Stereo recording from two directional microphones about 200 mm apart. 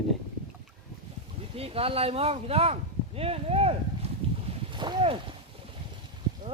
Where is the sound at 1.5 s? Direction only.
30° right (ahead or behind).